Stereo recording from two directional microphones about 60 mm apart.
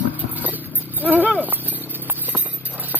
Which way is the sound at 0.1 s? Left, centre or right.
Right.